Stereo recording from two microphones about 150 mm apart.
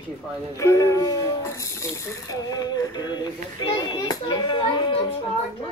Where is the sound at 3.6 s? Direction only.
30° left (ahead or behind).